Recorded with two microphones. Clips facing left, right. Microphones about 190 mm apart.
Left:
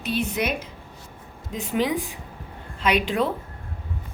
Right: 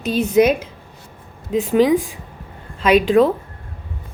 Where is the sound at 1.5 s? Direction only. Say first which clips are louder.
Right 13 dB; 90° right.